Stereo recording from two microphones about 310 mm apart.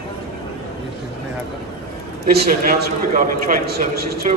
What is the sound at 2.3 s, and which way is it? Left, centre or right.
A man's voice, right.